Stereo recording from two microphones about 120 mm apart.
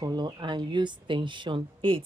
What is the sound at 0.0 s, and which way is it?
Speech, 35° right (ahead or behind).